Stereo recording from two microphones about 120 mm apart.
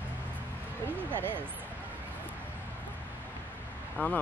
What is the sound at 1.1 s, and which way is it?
Speech, 15° right (ahead or behind).